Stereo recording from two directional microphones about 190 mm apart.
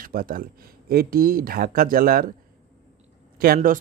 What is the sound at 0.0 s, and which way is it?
Speech, 50° right (ahead or behind).